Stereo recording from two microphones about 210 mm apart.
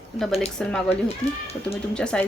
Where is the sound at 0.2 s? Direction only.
Centre (ahead or behind).